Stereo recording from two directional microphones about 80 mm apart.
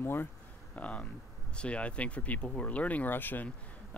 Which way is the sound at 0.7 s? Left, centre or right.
Centre.